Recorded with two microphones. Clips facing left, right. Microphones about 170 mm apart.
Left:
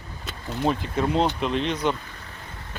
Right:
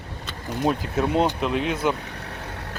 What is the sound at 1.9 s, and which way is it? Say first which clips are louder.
Vehicle: right 5 dB; 70° right (ahead or behind).